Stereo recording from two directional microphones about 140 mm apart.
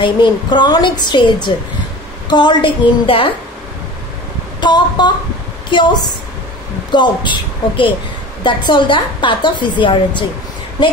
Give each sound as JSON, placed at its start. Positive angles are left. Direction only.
{"t": 0.0, "sound": "a woman's voice", "side_deg": 35}
{"t": 4.6, "sound": "a woman's voice", "side_deg": 35}